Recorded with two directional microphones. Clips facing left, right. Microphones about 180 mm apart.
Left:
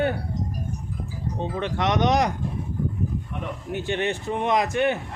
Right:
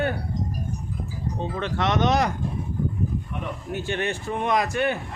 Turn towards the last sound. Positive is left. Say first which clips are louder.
# left 1 dB
turn(degrees=20)  # may be behind; listen again after turning